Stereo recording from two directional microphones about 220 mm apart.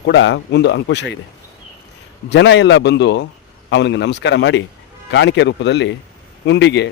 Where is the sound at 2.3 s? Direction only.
55° left (ahead or behind).